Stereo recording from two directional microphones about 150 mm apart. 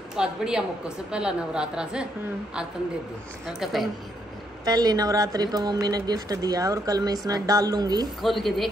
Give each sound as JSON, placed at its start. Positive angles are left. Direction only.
{"t": 0.1, "sound": "a woman's voice", "side_deg": -5}
{"t": 3.5, "sound": "a woman's voice", "side_deg": 0}
{"t": 4.6, "sound": "speech", "side_deg": -25}
{"t": 8.2, "sound": "a woman's voice", "side_deg": 0}